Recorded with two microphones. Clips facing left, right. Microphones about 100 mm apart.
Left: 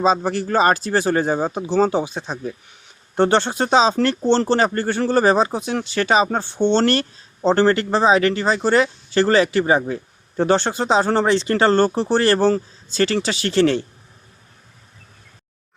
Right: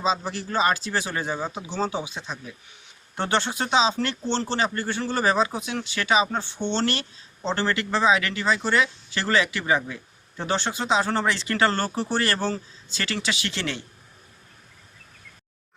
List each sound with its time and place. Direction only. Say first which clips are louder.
0.0 s speech: left 8 dB; 50° left (ahead or behind)
3.2 s speech: left 8 dB; 35° left (ahead or behind)